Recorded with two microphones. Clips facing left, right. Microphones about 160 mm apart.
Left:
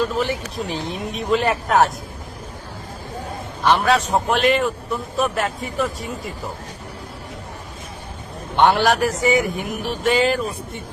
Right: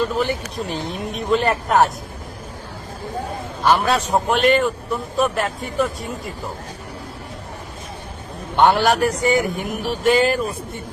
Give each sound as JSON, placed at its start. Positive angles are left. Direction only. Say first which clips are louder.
{"t": 0.0, "sound": "a man's voice", "louder": "right 1 dB", "side_deg": 0}
{"t": 3.6, "sound": "a man's voice", "louder": "even", "side_deg": 0}
{"t": 8.5, "sound": "a man's voice", "louder": "right 1 dB", "side_deg": 0}